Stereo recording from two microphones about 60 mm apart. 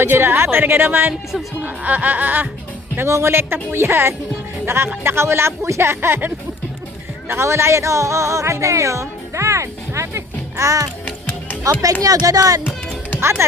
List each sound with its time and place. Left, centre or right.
0.0 s a woman's voice: right
1.6 s music: right
3.1 s a woman's voice: right
7.3 s speech: right
11.7 s speech: right